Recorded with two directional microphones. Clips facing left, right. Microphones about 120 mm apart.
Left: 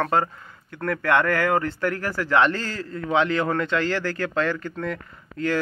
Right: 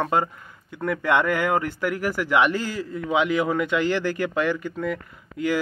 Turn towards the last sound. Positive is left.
turn(degrees=-10)  # may be behind; listen again after turning